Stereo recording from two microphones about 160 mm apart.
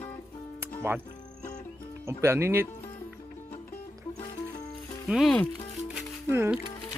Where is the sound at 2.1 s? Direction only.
15° right (ahead or behind).